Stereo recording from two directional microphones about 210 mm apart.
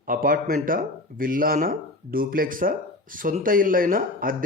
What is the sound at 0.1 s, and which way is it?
A man's voice, 40° right (ahead or behind).